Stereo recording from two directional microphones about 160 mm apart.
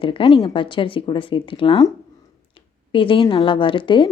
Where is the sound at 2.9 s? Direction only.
35° left (ahead or behind).